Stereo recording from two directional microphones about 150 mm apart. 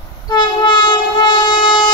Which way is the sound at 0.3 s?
30° left (ahead or behind).